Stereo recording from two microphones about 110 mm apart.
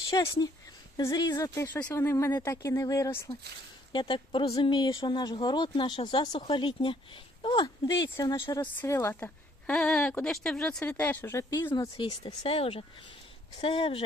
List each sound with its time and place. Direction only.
0.1 s speech: 35° left (ahead or behind)
1.8 s speech: 20° left (ahead or behind)
3.9 s speech: 50° left (ahead or behind)
7.5 s speech: 30° left (ahead or behind)
8.9 s speech: 20° left (ahead or behind)
9.6 s speech: 5° left (ahead or behind)
11.9 s speech: 40° left (ahead or behind)
12.4 s speech: 60° left (ahead or behind)